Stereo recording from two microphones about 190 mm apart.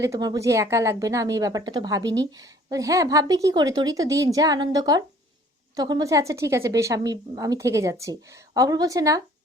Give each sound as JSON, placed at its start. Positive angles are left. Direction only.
{"t": 0.0, "sound": "a woman's voice", "side_deg": -20}